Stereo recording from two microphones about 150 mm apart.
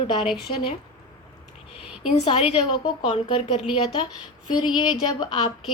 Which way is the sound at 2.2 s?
40° left (ahead or behind).